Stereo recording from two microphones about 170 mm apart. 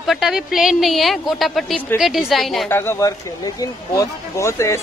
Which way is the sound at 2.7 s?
15° left (ahead or behind).